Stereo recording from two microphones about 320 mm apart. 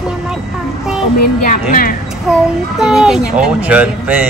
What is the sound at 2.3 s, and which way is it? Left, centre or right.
Speech, centre.